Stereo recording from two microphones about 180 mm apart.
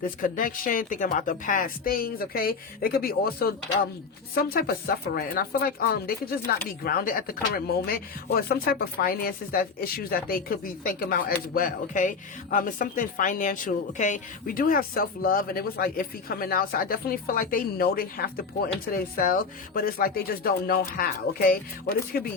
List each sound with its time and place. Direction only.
0.2 s speech: 50° left (ahead or behind)